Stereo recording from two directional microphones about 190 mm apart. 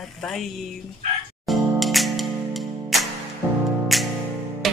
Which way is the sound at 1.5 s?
Centre (ahead or behind).